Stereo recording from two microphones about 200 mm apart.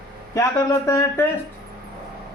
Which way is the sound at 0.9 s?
15° left (ahead or behind).